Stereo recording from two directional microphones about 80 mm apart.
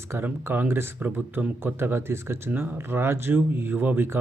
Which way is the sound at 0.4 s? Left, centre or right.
Right.